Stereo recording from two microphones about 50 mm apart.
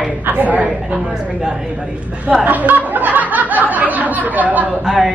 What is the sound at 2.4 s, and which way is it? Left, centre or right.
Snicker, right.